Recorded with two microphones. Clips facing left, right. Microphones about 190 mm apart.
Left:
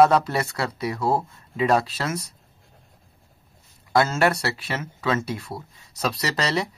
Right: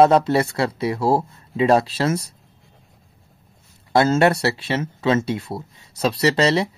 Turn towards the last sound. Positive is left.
turn(degrees=-25)  # may be behind; listen again after turning